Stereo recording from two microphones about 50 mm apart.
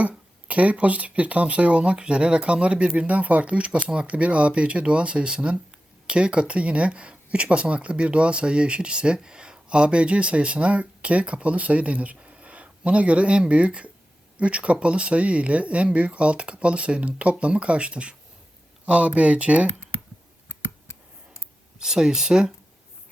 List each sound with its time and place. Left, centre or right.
0.4 s speech: right
21.8 s speech: centre